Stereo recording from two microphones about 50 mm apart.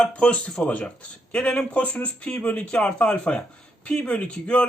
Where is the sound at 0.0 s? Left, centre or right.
Left.